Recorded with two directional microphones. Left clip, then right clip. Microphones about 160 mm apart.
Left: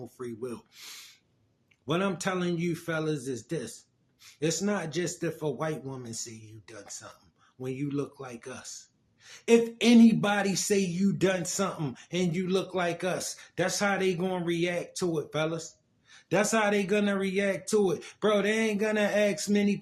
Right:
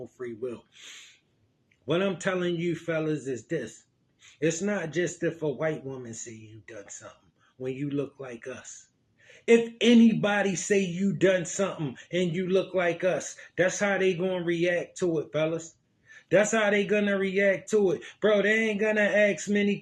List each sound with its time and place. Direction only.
0.0 s speech: 20° left (ahead or behind)
1.9 s speech: 20° left (ahead or behind)